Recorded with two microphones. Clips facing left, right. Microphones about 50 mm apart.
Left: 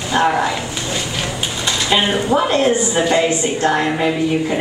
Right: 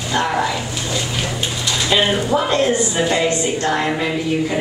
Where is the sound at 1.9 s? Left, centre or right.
Centre.